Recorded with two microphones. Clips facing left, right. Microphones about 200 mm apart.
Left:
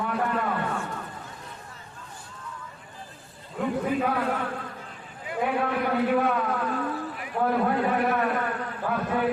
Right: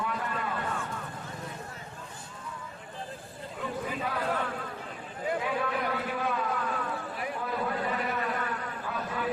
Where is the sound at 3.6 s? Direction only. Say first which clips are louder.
Left 9 dB; 55° left (ahead or behind).